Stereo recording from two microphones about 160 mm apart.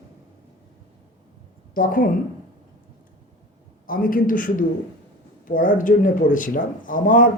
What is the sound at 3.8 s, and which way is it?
Speech, 60° left (ahead or behind).